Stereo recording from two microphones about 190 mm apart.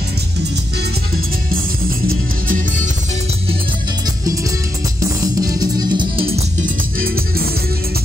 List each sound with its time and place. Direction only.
2.4 s music: 45° right (ahead or behind)
5.4 s music: 20° right (ahead or behind)